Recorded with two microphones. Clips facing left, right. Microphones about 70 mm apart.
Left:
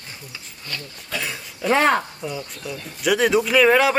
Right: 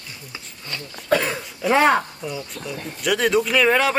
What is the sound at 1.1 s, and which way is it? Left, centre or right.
Speech, right.